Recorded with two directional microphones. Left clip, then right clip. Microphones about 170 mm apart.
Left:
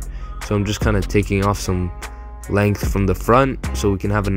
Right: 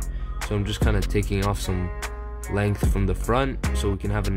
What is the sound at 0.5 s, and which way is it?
Speech, 20° left (ahead or behind).